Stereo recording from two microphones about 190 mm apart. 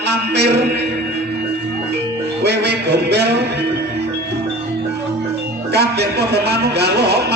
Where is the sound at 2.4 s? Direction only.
60° right (ahead or behind).